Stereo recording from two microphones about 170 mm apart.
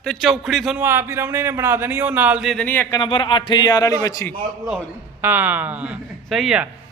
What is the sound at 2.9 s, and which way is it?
A man's voice, 30° left (ahead or behind).